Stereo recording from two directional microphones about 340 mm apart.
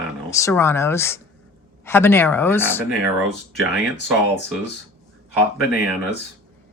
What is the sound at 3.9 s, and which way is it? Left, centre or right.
Speech, left.